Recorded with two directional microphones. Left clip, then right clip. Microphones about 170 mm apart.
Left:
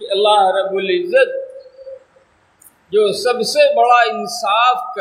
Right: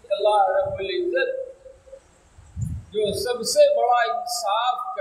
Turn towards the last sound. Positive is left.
turn(degrees=35)  # may be behind; listen again after turning